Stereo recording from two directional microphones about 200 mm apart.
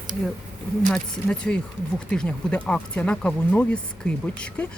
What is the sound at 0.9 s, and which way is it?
Speech, 5° left (ahead or behind).